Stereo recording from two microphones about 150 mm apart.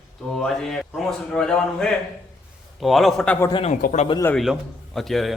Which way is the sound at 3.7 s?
60° left (ahead or behind).